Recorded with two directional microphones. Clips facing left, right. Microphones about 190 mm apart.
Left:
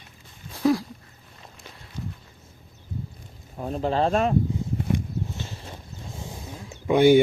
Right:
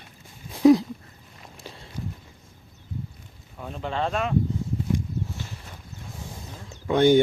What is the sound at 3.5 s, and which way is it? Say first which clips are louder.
Speech: left 6 dB; 35° left (ahead or behind).